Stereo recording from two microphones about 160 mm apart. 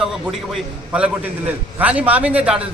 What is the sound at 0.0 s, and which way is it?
A man's voice, centre (ahead or behind).